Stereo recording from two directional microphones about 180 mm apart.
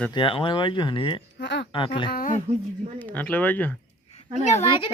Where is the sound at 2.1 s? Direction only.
55° left (ahead or behind).